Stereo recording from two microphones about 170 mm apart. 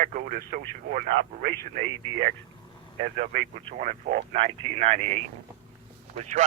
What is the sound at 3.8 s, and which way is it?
Speech, 50° right (ahead or behind).